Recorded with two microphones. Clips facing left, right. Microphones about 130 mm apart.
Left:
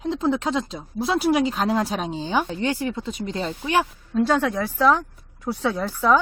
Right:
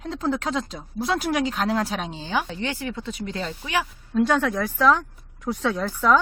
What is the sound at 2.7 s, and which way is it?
Speech, 35° left (ahead or behind).